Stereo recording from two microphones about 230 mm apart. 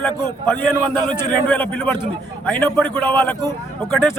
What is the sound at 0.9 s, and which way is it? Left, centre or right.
Speech, centre.